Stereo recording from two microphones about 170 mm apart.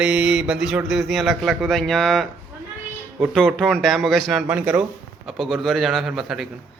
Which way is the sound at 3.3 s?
Centre (ahead or behind).